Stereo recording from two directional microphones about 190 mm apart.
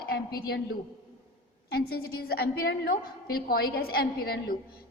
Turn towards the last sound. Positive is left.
turn(degrees=50)  # may be behind; listen again after turning